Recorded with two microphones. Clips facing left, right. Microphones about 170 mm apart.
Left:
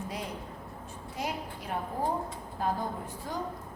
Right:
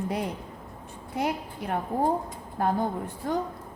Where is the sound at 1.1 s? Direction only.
60° right (ahead or behind).